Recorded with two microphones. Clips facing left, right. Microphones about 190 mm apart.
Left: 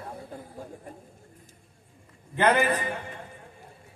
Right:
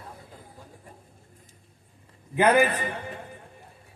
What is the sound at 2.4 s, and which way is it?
Speech, 10° right (ahead or behind).